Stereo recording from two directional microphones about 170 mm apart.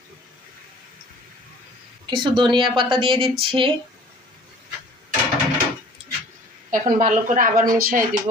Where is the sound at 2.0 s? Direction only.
25° right (ahead or behind).